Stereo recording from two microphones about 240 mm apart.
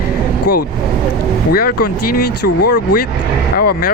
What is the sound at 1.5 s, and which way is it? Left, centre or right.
Speech, left.